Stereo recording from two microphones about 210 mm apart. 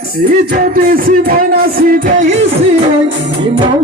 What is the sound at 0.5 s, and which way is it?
Music, 45° right (ahead or behind).